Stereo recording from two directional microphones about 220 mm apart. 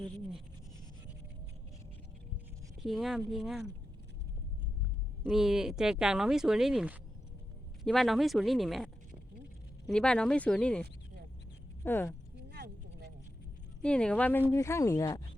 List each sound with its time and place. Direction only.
0.0 s speech: centre (ahead or behind)
2.8 s speech: centre (ahead or behind)
5.2 s speech: centre (ahead or behind)
12.5 s vehicle: 45° right (ahead or behind)
13.8 s speech: 5° left (ahead or behind)